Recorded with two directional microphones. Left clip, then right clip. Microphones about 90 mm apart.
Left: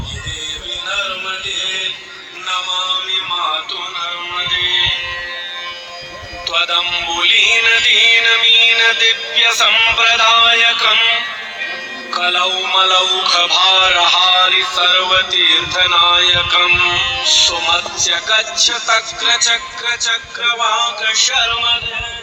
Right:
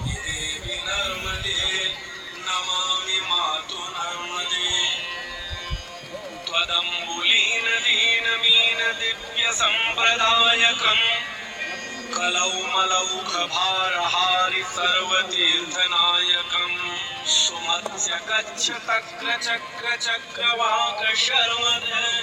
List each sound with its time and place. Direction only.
0.9 s music: 35° left (ahead or behind)
2.5 s synthetic singing: 35° left (ahead or behind)
3.1 s music: 5° left (ahead or behind)
4.0 s music: 35° left (ahead or behind)
6.5 s speech: 50° left (ahead or behind); by 19.6 s 25° left (ahead or behind)
19.8 s speech: centre (ahead or behind)
21.0 s a sound: 20° left (ahead or behind)
21.6 s music: 35° left (ahead or behind)